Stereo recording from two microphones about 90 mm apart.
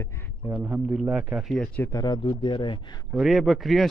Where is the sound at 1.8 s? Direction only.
45° left (ahead or behind); by 2.9 s 60° left (ahead or behind).